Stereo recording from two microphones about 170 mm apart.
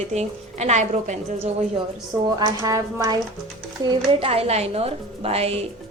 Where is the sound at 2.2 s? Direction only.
20° right (ahead or behind).